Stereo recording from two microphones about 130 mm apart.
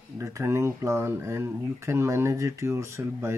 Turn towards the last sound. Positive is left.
turn(degrees=-20)  # may be behind; listen again after turning